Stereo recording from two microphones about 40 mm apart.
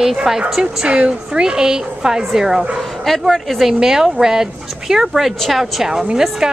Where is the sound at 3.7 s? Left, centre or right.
Centre.